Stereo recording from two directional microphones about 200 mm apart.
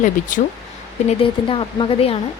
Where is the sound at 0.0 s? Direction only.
40° left (ahead or behind).